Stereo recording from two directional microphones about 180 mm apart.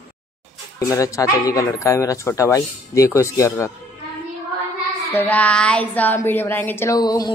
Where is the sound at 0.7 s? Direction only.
20° left (ahead or behind).